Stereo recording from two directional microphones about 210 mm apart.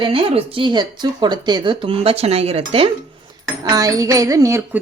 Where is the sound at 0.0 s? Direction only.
25° right (ahead or behind).